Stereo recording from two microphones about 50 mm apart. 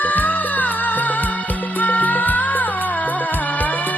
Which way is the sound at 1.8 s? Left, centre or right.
Left.